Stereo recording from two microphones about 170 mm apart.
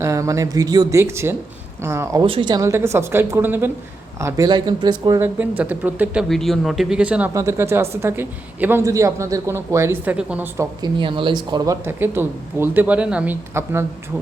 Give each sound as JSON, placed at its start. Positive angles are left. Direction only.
{"t": 0.0, "sound": "a woman's voice", "side_deg": -20}
{"t": 2.2, "sound": "a woman's voice", "side_deg": -30}
{"t": 5.4, "sound": "a woman's voice", "side_deg": -10}
{"t": 6.2, "sound": "speech", "side_deg": 0}
{"t": 7.3, "sound": "a woman's voice", "side_deg": -15}
{"t": 10.8, "sound": "a woman's voice", "side_deg": -30}